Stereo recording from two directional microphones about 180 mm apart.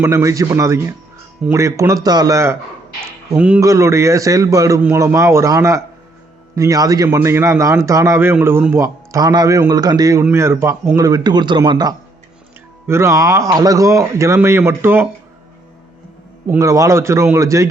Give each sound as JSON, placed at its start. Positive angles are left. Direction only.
{"t": 0.0, "sound": "a man's voice", "side_deg": -15}
{"t": 3.0, "sound": "music", "side_deg": -5}
{"t": 3.6, "sound": "a man's voice", "side_deg": -15}
{"t": 16.5, "sound": "a man's voice", "side_deg": -15}